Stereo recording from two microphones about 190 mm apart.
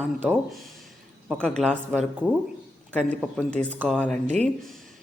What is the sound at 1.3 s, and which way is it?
A man's voice, centre (ahead or behind).